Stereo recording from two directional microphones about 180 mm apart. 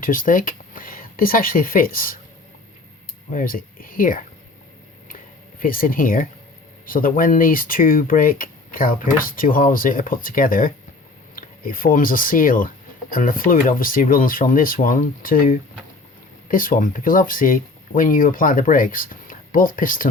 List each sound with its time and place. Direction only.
0.0 s speech: 50° left (ahead or behind)
3.3 s speech: 50° left (ahead or behind)
5.5 s speech: 50° left (ahead or behind)